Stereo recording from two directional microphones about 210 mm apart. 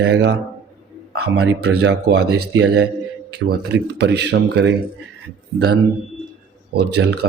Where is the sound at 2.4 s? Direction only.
75° right (ahead or behind); by 4.8 s 55° right (ahead or behind).